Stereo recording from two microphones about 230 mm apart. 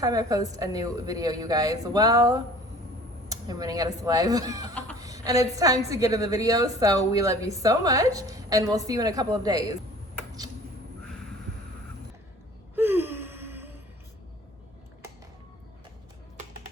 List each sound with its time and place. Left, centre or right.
0.0 s a woman's voice: centre
12.7 s gasp: centre